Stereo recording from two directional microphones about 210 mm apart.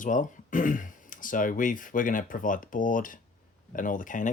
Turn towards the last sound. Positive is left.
turn(degrees=40)  # may be behind; listen again after turning